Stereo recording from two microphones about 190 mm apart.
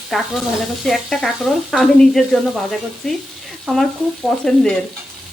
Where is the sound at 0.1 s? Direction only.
Centre (ahead or behind).